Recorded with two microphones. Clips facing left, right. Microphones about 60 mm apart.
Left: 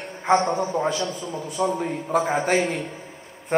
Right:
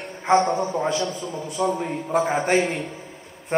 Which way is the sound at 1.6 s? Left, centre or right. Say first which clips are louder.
Even; centre.